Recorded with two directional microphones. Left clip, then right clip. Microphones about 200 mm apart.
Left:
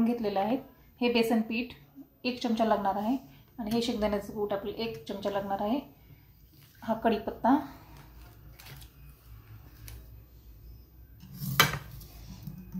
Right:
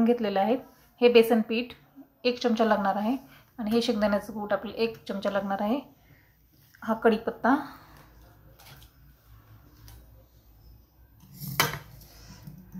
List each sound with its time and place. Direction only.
0.0 s a woman's voice: 15° right (ahead or behind)
6.9 s a woman's voice: 20° right (ahead or behind)